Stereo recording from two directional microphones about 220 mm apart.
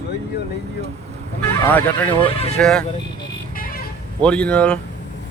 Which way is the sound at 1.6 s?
10° left (ahead or behind).